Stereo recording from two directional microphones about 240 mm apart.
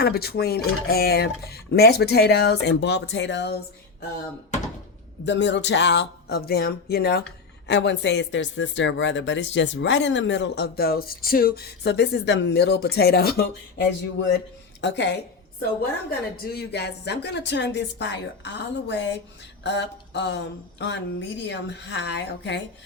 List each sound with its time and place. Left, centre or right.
0.0 s speech: left
5.2 s speech: left